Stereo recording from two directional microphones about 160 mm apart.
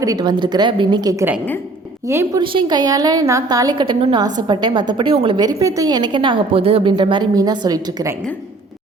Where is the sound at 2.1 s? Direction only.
15° right (ahead or behind).